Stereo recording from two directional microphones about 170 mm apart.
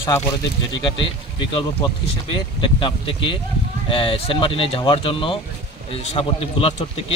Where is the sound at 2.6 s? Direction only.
30° left (ahead or behind).